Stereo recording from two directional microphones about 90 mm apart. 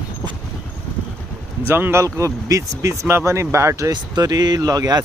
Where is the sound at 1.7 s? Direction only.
25° right (ahead or behind).